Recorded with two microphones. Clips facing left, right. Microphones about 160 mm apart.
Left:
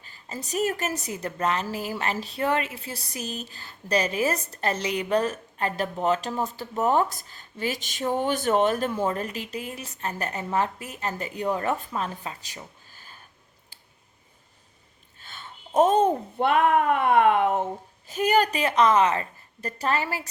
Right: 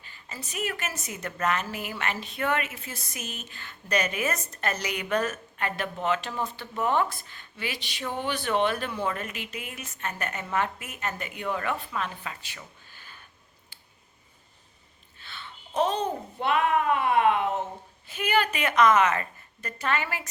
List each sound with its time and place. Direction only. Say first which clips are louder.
0.0 s a woman's voice: left 5 dB; 40° left (ahead or behind)
12.9 s a sound: left 1 dB; 40° left (ahead or behind)
15.2 s a child's voice: left 1 dB; 45° left (ahead or behind)
18.1 s a woman's voice: left 4 dB; 40° left (ahead or behind)